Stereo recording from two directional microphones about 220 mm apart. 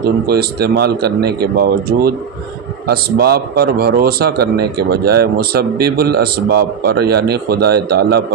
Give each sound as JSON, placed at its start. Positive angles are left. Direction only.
{"t": 0.0, "sound": "speech", "side_deg": -45}